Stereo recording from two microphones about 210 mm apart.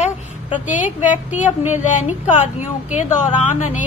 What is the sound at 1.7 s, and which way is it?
Speech, 35° left (ahead or behind).